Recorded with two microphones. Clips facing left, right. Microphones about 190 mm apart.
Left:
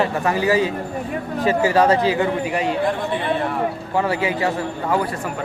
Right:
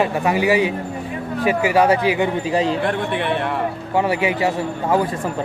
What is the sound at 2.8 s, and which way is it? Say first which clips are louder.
Speech: even; 65° right (ahead or behind).